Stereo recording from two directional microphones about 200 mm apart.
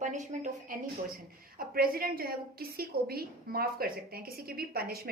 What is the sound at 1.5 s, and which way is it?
A woman's voice, 50° right (ahead or behind).